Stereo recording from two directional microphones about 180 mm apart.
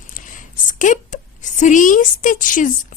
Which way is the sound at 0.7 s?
45° left (ahead or behind).